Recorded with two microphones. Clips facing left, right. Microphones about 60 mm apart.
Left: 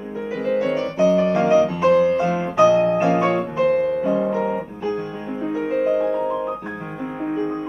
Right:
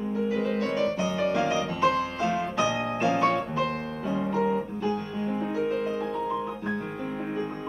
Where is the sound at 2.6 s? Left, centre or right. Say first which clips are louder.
Left 18 dB; left.